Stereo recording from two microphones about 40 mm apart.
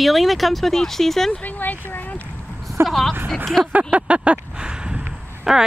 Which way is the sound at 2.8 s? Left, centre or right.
Centre.